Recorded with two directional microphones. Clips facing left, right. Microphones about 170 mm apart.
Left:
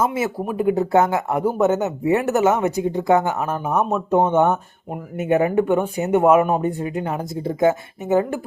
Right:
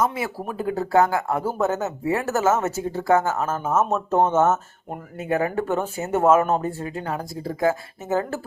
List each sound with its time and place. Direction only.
0.0 s speech: 25° left (ahead or behind)